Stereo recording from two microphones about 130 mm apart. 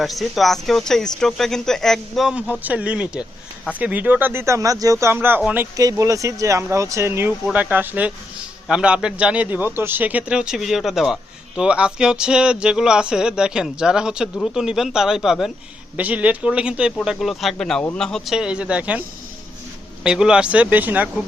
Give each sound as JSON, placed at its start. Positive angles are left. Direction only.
{"t": 0.0, "sound": "a man's voice", "side_deg": 0}
{"t": 5.7, "sound": "a man's voice", "side_deg": -25}
{"t": 20.1, "sound": "a man's voice", "side_deg": -5}